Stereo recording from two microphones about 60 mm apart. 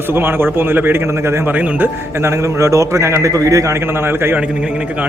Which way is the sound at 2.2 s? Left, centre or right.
Right.